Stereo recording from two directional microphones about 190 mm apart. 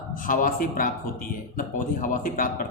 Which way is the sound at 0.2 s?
45° left (ahead or behind).